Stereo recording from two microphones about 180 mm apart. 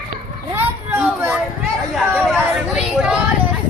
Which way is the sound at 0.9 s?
5° right (ahead or behind).